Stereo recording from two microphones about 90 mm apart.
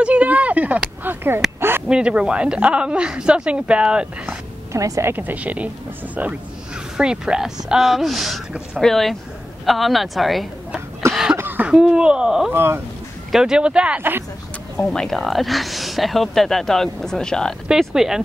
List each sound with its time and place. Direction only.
0.0 s a woman's voice: 15° right (ahead or behind)
1.9 s a woman's voice: 10° right (ahead or behind)
4.7 s a woman's voice: 40° right (ahead or behind)
5.0 s a woman's voice: 20° right (ahead or behind)
7.0 s a woman's voice: 10° right (ahead or behind)
11.3 s cough: 20° right (ahead or behind)
11.7 s a woman's voice: 10° right (ahead or behind)
12.5 s speech: 25° right (ahead or behind)
13.3 s a woman's voice: 5° right (ahead or behind)
14.8 s speech: 5° left (ahead or behind)
17.6 s speech: 5° right (ahead or behind)